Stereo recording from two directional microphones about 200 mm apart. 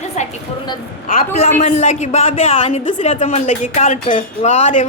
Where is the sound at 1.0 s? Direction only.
45° left (ahead or behind).